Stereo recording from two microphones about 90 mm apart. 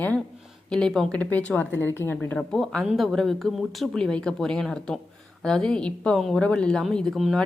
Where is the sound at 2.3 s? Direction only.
5° left (ahead or behind).